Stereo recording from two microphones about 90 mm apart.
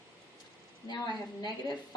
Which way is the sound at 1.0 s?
45° left (ahead or behind).